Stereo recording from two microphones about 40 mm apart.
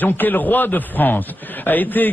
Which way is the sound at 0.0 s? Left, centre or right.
Left.